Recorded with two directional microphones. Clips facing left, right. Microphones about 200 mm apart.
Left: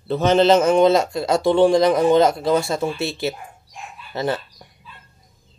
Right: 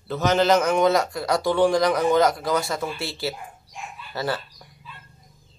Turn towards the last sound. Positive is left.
turn(degrees=20)  # may be behind; listen again after turning